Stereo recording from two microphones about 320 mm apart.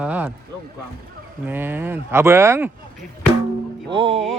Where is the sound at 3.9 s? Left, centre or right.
Centre.